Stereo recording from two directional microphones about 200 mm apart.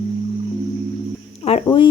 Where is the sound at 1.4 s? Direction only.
30° left (ahead or behind).